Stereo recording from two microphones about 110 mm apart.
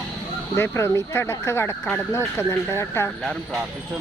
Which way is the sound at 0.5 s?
20° left (ahead or behind).